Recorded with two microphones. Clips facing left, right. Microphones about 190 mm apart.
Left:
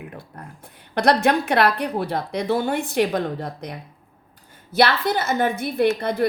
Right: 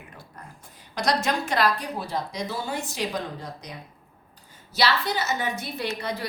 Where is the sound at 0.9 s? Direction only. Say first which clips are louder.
Left 7 dB; 60° left (ahead or behind).